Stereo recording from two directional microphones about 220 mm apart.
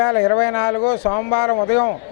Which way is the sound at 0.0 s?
20° left (ahead or behind).